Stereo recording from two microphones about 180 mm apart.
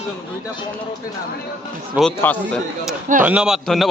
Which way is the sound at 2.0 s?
5° left (ahead or behind).